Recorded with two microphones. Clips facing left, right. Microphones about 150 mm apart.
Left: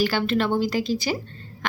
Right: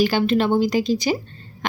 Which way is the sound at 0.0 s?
15° right (ahead or behind).